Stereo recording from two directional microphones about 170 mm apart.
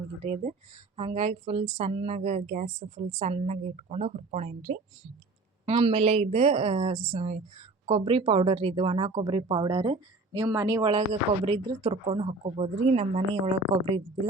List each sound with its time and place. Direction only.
0.9 s a woman's voice: 35° right (ahead or behind)
5.6 s a woman's voice: 30° right (ahead or behind)